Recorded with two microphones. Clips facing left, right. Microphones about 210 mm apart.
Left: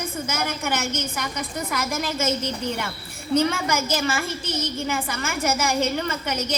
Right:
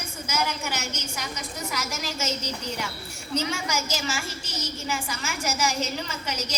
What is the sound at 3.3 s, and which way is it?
A woman's voice, 55° left (ahead or behind).